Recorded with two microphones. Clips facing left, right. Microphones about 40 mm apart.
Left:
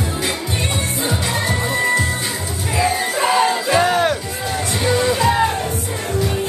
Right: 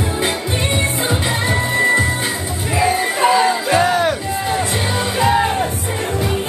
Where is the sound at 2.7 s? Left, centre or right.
Centre.